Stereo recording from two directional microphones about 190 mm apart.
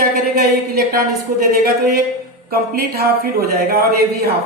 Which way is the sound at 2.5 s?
50° right (ahead or behind).